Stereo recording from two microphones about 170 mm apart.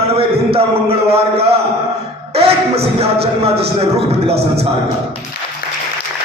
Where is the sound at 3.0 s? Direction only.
35° right (ahead or behind).